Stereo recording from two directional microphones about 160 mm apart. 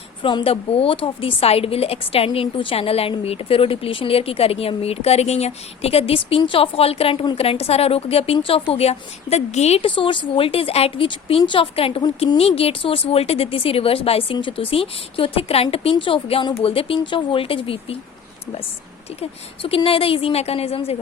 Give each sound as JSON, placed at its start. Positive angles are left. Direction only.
{"t": 0.2, "sound": "a woman's voice", "side_deg": 30}
{"t": 19.2, "sound": "a woman's voice", "side_deg": 35}